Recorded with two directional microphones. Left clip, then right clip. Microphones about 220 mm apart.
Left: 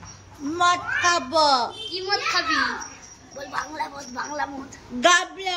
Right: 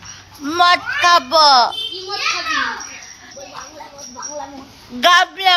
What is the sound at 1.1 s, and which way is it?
A child's voice, 5° left (ahead or behind).